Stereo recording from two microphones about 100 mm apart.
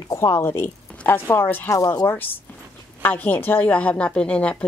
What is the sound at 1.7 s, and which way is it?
Speech, 35° left (ahead or behind).